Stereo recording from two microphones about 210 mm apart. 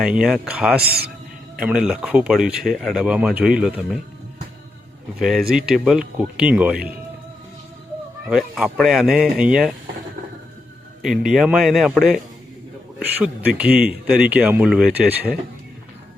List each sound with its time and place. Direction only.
0.0 s speech: 5° right (ahead or behind)
0.8 s a man's voice: 50° right (ahead or behind)
1.5 s speech: 5° right (ahead or behind)
5.5 s speech: 5° right (ahead or behind)
8.3 s speech: centre (ahead or behind)
11.0 s speech: centre (ahead or behind)
13.6 s speech: 5° right (ahead or behind)